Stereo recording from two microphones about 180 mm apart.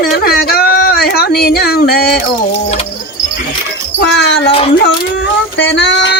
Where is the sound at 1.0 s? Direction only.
60° left (ahead or behind).